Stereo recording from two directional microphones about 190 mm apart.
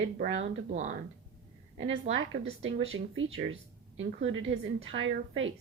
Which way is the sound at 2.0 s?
90° right.